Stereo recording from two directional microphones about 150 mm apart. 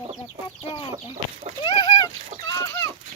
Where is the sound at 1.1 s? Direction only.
50° right (ahead or behind).